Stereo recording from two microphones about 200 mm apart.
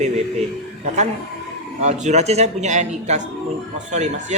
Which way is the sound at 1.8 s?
35° right (ahead or behind).